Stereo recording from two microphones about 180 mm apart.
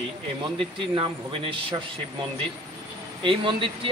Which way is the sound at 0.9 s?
30° right (ahead or behind).